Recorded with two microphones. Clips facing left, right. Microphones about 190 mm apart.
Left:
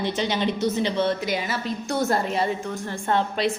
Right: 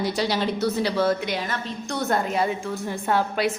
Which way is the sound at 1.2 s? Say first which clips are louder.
Left 1 dB; 5° left (ahead or behind).